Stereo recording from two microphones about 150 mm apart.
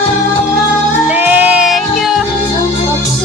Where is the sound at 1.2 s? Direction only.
10° right (ahead or behind).